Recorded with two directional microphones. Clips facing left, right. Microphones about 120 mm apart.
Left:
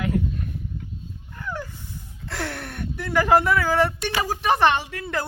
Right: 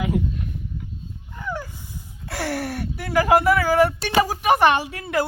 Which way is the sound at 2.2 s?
5° right (ahead or behind).